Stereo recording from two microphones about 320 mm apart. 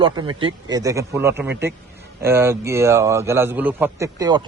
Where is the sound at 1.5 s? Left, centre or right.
Right.